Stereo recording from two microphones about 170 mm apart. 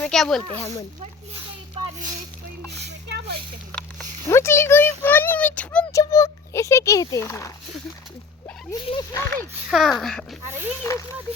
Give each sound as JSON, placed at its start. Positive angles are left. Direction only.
{"t": 0.0, "sound": "speech", "side_deg": 0}
{"t": 2.7, "sound": "a sound", "side_deg": -80}
{"t": 4.3, "sound": "a child's voice", "side_deg": 15}
{"t": 6.0, "sound": "a child's voice", "side_deg": 20}
{"t": 8.7, "sound": "speech", "side_deg": 25}
{"t": 9.2, "sound": "a child's voice", "side_deg": 10}
{"t": 9.6, "sound": "speech", "side_deg": 0}
{"t": 10.8, "sound": "speech", "side_deg": 20}